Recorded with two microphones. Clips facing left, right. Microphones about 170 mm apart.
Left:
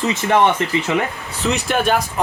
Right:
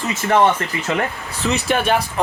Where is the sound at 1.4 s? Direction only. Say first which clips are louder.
Even; centre (ahead or behind).